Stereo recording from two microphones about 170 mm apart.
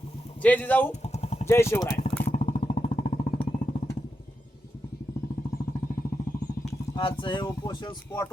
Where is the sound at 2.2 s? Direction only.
35° left (ahead or behind).